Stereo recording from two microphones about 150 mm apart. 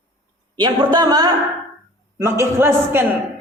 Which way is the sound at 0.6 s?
30° right (ahead or behind).